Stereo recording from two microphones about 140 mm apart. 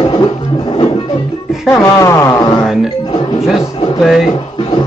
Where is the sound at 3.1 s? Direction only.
35° left (ahead or behind).